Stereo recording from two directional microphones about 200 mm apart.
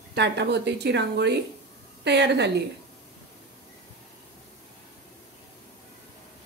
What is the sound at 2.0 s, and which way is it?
Speech, 60° right (ahead or behind).